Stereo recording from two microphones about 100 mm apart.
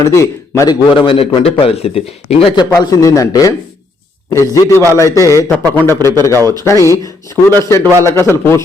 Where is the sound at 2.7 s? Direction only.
35° left (ahead or behind).